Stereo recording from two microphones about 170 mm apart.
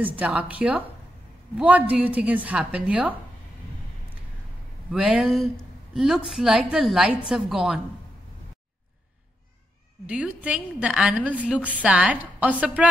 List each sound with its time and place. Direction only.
0.0 s a woman's voice: 10° right (ahead or behind)
4.9 s a woman's voice: 5° right (ahead or behind)
10.0 s a woman's voice: 5° right (ahead or behind)